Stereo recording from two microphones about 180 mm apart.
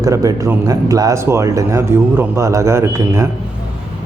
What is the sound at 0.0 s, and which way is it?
A man's voice, 20° right (ahead or behind).